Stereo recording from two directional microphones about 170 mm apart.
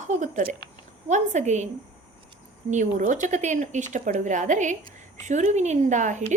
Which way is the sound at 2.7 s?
50° right (ahead or behind).